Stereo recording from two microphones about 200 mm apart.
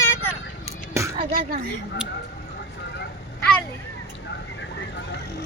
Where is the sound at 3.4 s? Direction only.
5° left (ahead or behind).